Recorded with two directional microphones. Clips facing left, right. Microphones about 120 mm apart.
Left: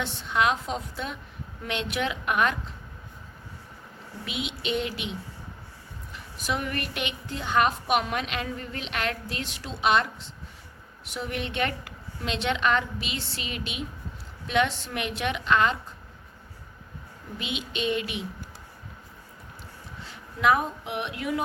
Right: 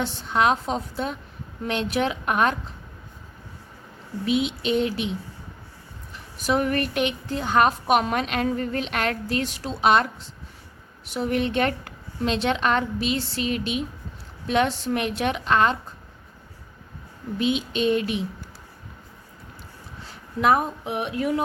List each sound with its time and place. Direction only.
0.0 s a woman's voice: 35° right (ahead or behind)
4.3 s a woman's voice: 35° right (ahead or behind)
6.4 s a woman's voice: 40° right (ahead or behind)
17.3 s a woman's voice: 35° right (ahead or behind)
20.1 s speech: 40° right (ahead or behind)